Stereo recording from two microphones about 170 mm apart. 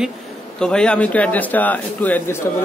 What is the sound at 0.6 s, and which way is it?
Speech, 5° left (ahead or behind).